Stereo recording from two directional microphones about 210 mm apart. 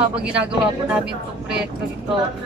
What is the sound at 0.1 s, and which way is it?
Speech, 5° right (ahead or behind).